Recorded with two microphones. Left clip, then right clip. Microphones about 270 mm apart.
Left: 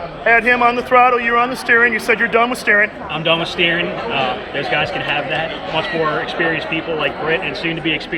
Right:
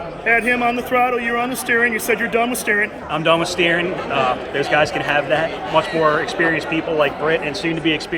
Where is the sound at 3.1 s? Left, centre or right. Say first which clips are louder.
Right 3 dB; right.